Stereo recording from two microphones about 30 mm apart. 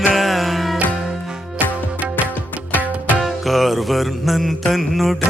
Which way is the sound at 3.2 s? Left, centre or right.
Centre.